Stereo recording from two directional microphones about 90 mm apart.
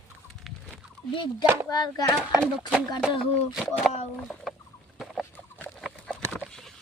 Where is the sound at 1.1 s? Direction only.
65° left (ahead or behind).